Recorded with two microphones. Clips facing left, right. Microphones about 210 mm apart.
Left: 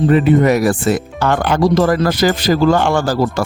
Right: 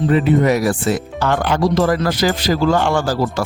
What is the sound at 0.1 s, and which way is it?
Speech, 55° left (ahead or behind).